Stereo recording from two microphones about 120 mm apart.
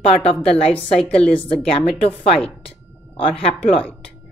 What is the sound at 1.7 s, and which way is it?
Speech, 55° left (ahead or behind).